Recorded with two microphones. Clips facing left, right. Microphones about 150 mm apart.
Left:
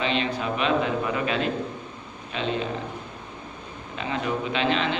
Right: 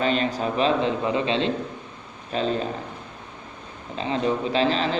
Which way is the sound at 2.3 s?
40° right (ahead or behind).